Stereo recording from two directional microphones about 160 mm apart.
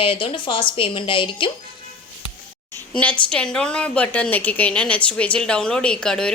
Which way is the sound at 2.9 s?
5° left (ahead or behind).